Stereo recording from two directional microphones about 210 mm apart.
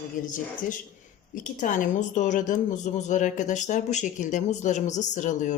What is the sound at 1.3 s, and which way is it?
A woman's voice, 40° left (ahead or behind).